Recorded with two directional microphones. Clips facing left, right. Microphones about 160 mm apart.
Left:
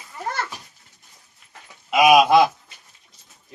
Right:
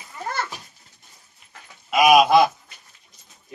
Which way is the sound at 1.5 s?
20° left (ahead or behind).